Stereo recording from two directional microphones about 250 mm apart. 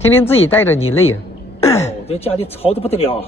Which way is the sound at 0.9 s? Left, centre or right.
Left.